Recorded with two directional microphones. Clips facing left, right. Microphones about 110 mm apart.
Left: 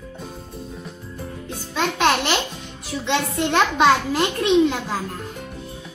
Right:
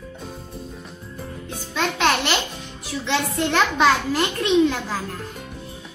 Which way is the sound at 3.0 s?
25° left (ahead or behind).